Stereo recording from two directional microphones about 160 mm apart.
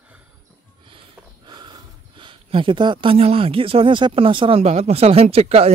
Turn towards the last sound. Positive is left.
turn(degrees=-40)  # may be behind; listen again after turning